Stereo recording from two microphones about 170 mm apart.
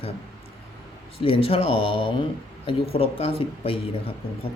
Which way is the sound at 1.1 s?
35° left (ahead or behind).